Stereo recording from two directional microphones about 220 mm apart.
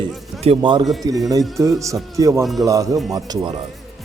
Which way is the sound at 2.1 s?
15° right (ahead or behind).